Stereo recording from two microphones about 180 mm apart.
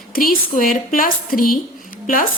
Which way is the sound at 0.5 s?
50° left (ahead or behind).